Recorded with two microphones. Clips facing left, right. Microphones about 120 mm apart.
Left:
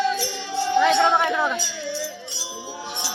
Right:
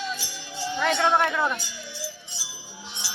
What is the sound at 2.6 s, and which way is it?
Music, 75° left (ahead or behind).